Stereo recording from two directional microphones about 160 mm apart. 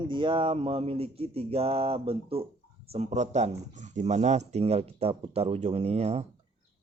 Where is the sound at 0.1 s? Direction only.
30° right (ahead or behind).